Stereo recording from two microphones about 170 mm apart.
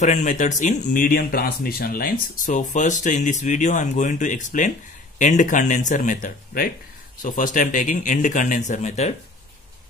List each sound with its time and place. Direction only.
0.0 s speech: 45° left (ahead or behind)